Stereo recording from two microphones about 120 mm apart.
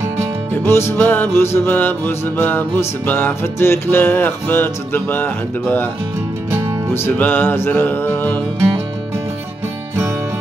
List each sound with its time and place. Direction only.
0.7 s music: 20° left (ahead or behind)
6.9 s music: 15° left (ahead or behind)